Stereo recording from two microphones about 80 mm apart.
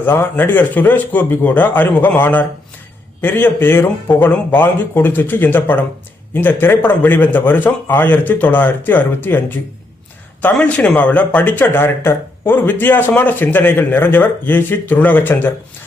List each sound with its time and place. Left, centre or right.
0.0 s speech: left